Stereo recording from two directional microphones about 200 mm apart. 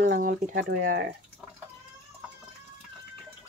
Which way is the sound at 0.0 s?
45° right (ahead or behind).